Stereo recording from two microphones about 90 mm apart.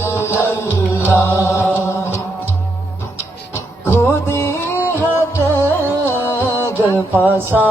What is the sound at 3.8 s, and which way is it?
Music, 25° left (ahead or behind).